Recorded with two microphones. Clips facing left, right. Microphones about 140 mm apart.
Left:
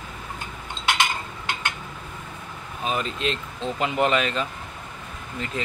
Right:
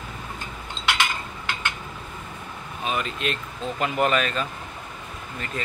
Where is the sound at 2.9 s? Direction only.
30° left (ahead or behind).